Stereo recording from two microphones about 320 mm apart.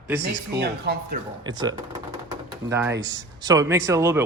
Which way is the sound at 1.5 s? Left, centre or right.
Centre.